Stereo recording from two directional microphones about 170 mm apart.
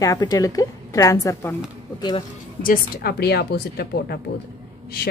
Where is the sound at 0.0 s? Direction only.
20° left (ahead or behind).